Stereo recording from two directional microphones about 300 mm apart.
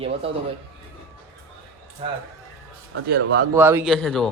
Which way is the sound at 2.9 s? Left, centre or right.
Right.